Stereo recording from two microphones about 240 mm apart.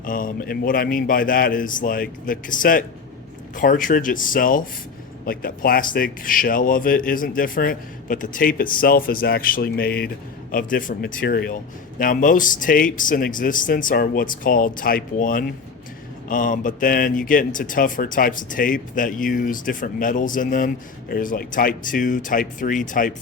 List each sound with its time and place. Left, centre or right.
0.0 s a man's voice: left